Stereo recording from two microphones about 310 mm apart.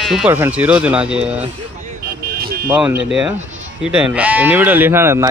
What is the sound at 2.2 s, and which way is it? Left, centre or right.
Vehicle, right.